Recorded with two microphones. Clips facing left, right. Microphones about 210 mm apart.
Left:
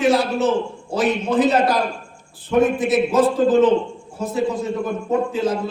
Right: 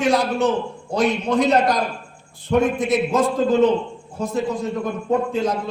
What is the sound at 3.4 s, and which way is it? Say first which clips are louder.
Speech: left 2 dB; 45° left (ahead or behind).